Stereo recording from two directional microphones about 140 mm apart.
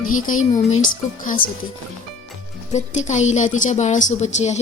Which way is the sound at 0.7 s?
70° left (ahead or behind).